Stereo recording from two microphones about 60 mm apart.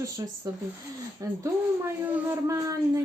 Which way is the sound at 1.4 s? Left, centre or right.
Right.